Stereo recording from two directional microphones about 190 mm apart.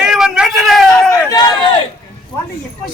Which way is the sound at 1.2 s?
20° left (ahead or behind).